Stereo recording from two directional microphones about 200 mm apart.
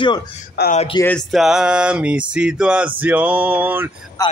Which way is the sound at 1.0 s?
5° left (ahead or behind).